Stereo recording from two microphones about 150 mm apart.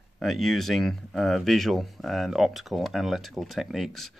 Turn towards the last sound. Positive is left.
turn(degrees=0)  # may be behind; listen again after turning